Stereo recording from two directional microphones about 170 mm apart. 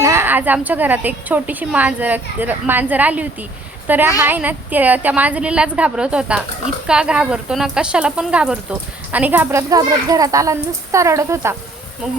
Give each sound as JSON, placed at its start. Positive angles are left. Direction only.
{"t": 0.0, "sound": "a woman's voice", "side_deg": -15}